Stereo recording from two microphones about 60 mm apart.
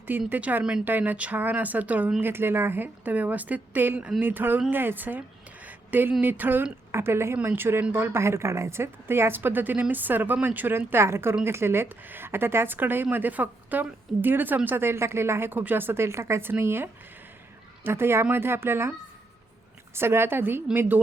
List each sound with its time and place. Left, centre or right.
0.1 s a woman's voice: right
2.2 s a woman's voice: right
5.6 s a sound: right
6.2 s a woman's voice: right
6.9 s a woman's voice: right